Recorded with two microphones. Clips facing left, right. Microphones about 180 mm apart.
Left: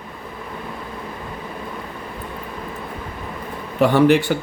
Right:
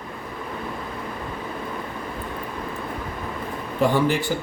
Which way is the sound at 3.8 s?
70° left (ahead or behind).